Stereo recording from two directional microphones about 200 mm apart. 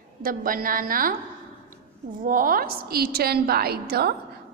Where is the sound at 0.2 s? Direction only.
45° right (ahead or behind).